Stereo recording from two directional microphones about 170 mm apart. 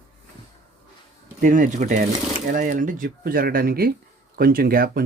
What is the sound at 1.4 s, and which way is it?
Speech, 50° right (ahead or behind).